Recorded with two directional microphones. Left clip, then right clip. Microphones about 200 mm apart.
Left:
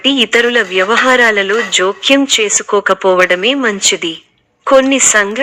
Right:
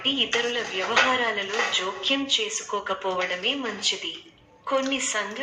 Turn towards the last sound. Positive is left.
turn(degrees=50)  # may be behind; listen again after turning